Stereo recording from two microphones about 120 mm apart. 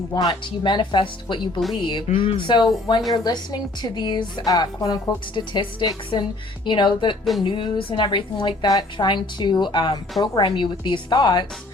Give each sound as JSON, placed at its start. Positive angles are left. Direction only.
{"t": 0.1, "sound": "a woman's voice", "side_deg": 35}